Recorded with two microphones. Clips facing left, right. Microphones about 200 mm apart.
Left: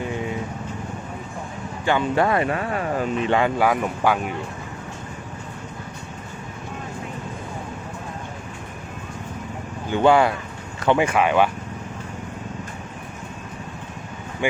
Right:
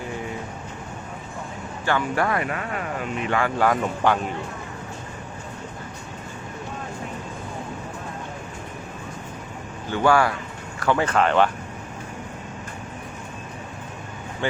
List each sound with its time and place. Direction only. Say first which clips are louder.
1.8 s speech: left 3 dB; 20° left (ahead or behind)
3.6 s speech: left 1 dB; 5° left (ahead or behind)
9.9 s speech: left 3 dB; 20° left (ahead or behind)